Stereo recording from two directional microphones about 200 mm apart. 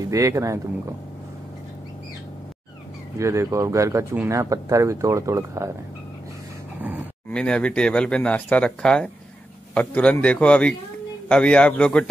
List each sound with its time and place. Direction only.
0.1 s speech: 15° right (ahead or behind)
3.2 s speech: 15° right (ahead or behind)
6.8 s a sound: 10° right (ahead or behind)
7.2 s speech: 5° left (ahead or behind)